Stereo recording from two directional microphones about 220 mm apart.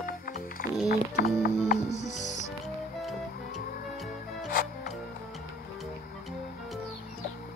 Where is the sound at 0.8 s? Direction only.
45° left (ahead or behind).